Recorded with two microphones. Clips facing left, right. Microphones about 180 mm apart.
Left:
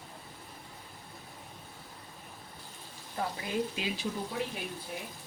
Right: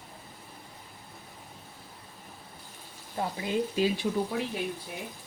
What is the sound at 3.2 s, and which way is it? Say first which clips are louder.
Frying: right 2 dB; 25° right (ahead or behind).